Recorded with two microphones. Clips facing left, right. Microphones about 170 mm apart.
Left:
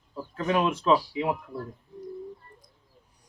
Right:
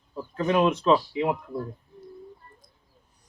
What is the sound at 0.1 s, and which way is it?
Speech, centre (ahead or behind).